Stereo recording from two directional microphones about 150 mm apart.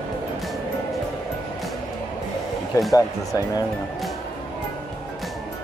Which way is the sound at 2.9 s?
25° left (ahead or behind).